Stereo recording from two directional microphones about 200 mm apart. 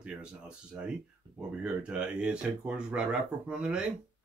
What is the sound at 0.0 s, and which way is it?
Speech, 5° right (ahead or behind).